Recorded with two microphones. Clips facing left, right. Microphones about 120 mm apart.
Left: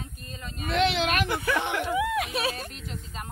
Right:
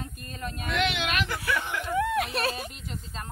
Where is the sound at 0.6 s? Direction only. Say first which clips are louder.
Left 4 dB; 35° left (ahead or behind).